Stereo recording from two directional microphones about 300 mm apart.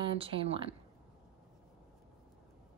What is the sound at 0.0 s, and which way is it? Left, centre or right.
Speech, centre.